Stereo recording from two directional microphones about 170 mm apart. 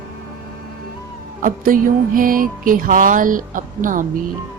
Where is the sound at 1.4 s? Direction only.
55° right (ahead or behind).